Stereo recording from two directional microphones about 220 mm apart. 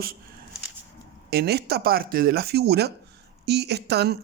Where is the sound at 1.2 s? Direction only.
45° right (ahead or behind).